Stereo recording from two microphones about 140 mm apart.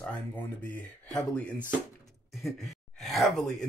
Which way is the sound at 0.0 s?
10° left (ahead or behind).